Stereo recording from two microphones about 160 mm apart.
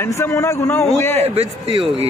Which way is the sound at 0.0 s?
20° left (ahead or behind).